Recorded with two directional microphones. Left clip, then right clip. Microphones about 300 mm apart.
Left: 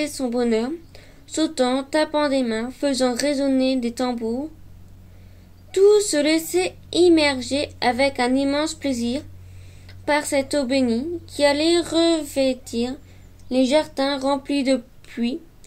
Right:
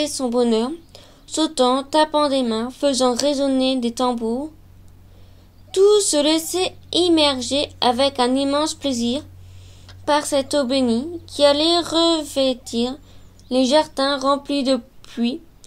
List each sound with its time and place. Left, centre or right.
0.2 s a woman's voice: centre
5.7 s a woman's voice: centre
8.8 s speech: right
9.8 s a woman's voice: centre